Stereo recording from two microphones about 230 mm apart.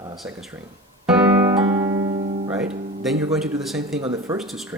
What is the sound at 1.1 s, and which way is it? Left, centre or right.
Music, centre.